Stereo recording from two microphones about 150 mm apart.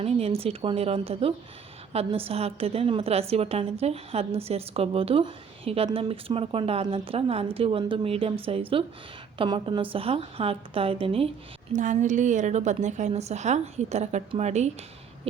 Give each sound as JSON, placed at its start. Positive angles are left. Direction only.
{"t": 0.0, "sound": "a woman's voice", "side_deg": -40}
{"t": 11.7, "sound": "a woman's voice", "side_deg": -55}